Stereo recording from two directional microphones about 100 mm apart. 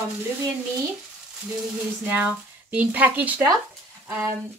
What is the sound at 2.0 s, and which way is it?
Speech, 15° right (ahead or behind).